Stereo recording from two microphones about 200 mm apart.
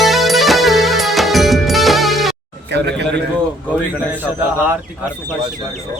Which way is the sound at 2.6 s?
60° right (ahead or behind).